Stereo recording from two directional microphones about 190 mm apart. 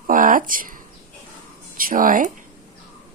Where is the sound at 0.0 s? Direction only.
45° right (ahead or behind).